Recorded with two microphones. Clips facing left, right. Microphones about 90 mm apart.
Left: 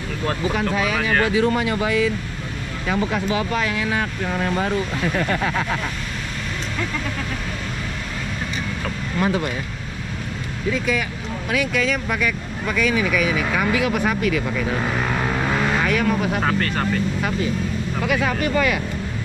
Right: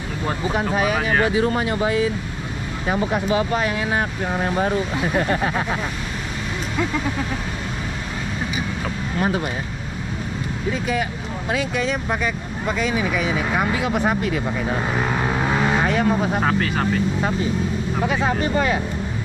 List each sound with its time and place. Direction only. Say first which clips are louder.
0.7 s speech: right 3 dB; 20° right (ahead or behind)
5.1 s speech: right 2 dB; 30° right (ahead or behind)
11.5 s speech: left 1 dB; 25° right (ahead or behind)
14.8 s vehicle: right 1 dB; 10° right (ahead or behind)
15.8 s vehicle: right 1 dB; 25° right (ahead or behind)
16.3 s speech: right 1 dB; 5° right (ahead or behind)
18.0 s speech: even; 25° right (ahead or behind)